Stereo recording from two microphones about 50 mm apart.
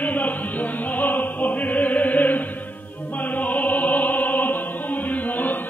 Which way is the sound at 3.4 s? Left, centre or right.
Left.